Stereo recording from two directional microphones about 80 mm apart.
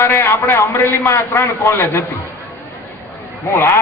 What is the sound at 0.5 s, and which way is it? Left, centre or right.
A man's voice, left.